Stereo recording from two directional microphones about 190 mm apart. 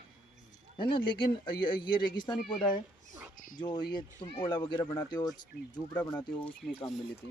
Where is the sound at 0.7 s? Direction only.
25° left (ahead or behind).